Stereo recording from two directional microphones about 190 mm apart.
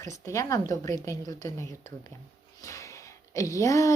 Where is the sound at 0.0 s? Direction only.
15° left (ahead or behind).